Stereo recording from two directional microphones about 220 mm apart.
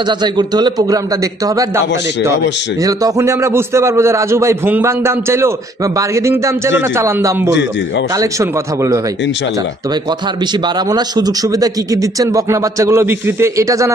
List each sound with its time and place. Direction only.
0.2 s a man's voice: 20° right (ahead or behind)
10.9 s speech: 20° right (ahead or behind)